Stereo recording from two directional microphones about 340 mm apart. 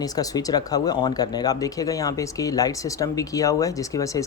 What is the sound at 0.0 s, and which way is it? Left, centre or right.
Speech, centre.